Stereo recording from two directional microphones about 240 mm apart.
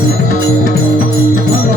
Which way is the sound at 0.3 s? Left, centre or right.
Right.